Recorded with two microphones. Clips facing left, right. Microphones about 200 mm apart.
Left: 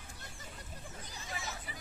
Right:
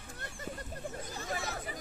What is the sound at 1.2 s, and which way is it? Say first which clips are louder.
Chatter: right 6 dB; 60° right (ahead or behind).